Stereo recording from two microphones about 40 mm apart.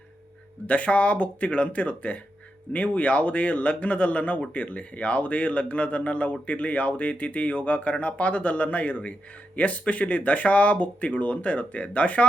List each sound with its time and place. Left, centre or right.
0.7 s speech: left